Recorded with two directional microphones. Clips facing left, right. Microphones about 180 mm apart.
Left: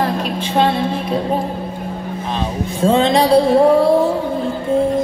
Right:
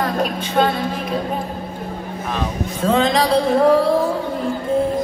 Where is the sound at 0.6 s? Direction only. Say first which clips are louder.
Left 2 dB; 25° left (ahead or behind).